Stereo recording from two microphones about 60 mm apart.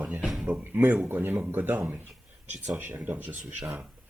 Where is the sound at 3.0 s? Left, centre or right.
Right.